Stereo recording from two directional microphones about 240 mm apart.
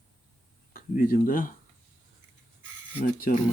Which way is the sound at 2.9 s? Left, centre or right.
Left.